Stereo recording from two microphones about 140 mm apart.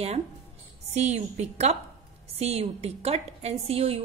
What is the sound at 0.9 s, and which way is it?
A woman's voice, 55° right (ahead or behind).